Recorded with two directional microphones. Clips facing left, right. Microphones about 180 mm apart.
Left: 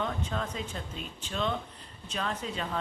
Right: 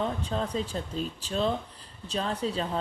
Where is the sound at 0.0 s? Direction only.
35° right (ahead or behind).